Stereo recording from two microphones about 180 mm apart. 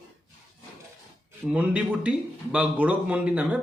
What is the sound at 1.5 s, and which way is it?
A man's voice, 5° right (ahead or behind).